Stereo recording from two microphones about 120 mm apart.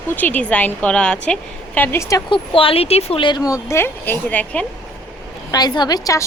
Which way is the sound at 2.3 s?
50° left (ahead or behind).